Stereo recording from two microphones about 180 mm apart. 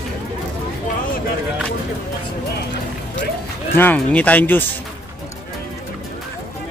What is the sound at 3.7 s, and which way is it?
Speech, 10° left (ahead or behind).